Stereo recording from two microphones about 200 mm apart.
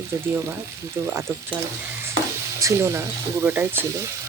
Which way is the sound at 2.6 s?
15° right (ahead or behind).